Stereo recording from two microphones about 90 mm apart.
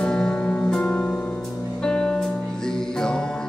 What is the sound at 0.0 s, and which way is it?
Music, 10° left (ahead or behind).